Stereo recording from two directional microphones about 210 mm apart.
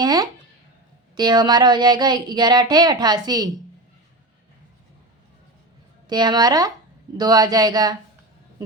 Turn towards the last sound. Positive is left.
turn(degrees=-20)  # may be behind; listen again after turning